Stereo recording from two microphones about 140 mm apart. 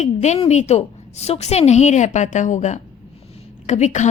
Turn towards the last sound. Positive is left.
turn(degrees=55)  # may be behind; listen again after turning